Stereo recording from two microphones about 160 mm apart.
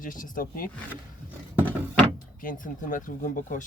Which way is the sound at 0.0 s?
60° left (ahead or behind).